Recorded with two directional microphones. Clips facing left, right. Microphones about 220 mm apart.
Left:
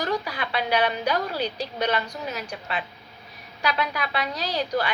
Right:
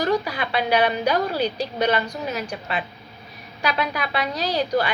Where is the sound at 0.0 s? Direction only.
10° right (ahead or behind).